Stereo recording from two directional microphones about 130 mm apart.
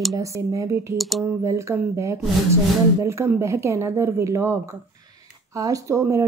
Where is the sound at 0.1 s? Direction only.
25° right (ahead or behind).